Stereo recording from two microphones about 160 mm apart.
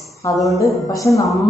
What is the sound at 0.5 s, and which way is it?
Speech, 20° left (ahead or behind).